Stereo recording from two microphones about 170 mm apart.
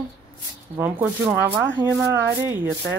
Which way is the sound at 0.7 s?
10° right (ahead or behind).